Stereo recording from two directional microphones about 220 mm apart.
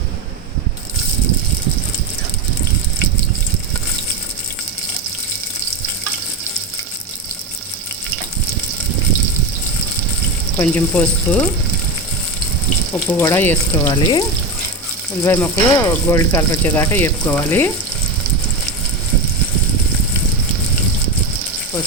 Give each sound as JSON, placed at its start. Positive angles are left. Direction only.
{"t": 10.6, "sound": "speech", "side_deg": 5}
{"t": 13.1, "sound": "speech", "side_deg": 10}